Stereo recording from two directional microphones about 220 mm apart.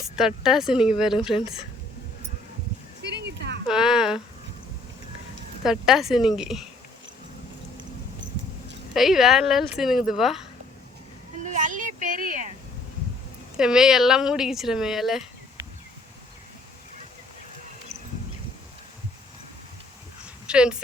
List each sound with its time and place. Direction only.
0.0 s speech: centre (ahead or behind)
3.0 s a sound: 50° right (ahead or behind)
3.7 s speech: 5° right (ahead or behind)
5.6 s speech: centre (ahead or behind)
8.9 s speech: centre (ahead or behind)
11.4 s a sound: 35° right (ahead or behind)
13.6 s speech: 5° right (ahead or behind)
20.5 s speech: 5° right (ahead or behind)